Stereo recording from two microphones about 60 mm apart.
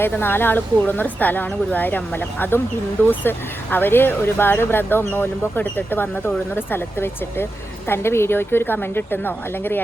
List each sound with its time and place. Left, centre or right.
0.0 s speech: left